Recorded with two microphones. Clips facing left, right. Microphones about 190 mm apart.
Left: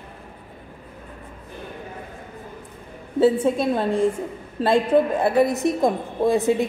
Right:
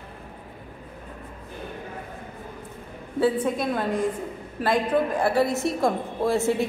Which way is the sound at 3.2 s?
25° left (ahead or behind).